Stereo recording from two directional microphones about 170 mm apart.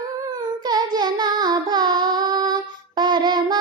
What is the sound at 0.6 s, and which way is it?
Child singing, 25° right (ahead or behind).